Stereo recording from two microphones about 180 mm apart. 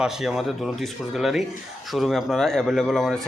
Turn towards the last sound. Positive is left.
turn(degrees=0)  # may be behind; listen again after turning